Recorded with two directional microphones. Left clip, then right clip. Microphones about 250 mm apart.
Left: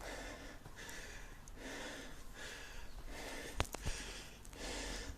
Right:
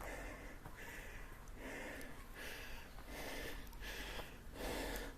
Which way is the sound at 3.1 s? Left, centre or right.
Centre.